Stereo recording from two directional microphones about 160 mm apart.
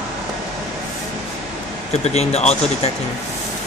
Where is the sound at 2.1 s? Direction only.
40° left (ahead or behind).